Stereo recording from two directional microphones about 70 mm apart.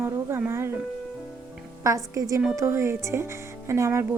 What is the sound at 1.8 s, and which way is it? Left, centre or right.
Speech, right.